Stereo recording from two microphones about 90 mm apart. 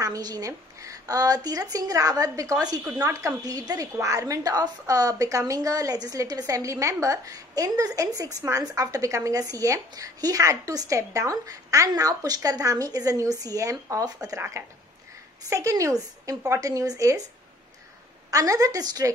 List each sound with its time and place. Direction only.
0.0 s a woman's voice: 45° right (ahead or behind)
15.5 s a woman's voice: 35° right (ahead or behind)
18.3 s a woman's voice: 40° right (ahead or behind)